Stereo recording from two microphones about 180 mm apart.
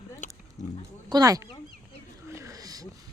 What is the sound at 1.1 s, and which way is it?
Speech, 20° right (ahead or behind).